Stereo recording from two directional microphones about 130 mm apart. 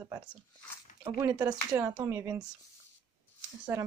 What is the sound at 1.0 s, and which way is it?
Speech, 15° right (ahead or behind).